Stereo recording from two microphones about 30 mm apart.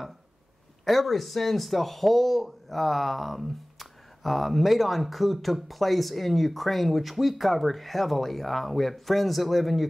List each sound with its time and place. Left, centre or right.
0.8 s speech: centre